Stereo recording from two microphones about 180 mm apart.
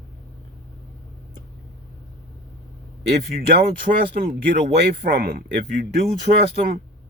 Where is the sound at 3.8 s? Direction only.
50° right (ahead or behind).